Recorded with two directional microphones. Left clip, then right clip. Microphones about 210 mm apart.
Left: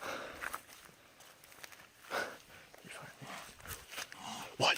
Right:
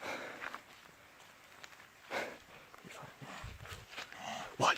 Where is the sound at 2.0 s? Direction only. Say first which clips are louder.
Left 1 dB; 20° right (ahead or behind).